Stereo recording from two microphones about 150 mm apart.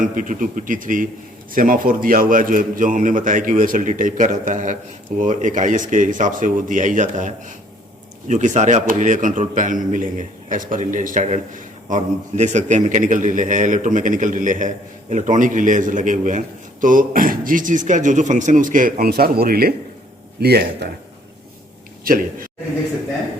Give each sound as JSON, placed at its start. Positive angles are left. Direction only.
{"t": 0.0, "sound": "a man's voice", "side_deg": -60}
{"t": 22.0, "sound": "speech", "side_deg": -70}